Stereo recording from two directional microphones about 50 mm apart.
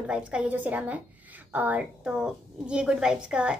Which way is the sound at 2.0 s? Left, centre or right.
Centre.